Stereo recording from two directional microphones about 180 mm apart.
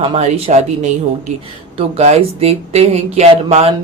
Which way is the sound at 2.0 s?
35° right (ahead or behind).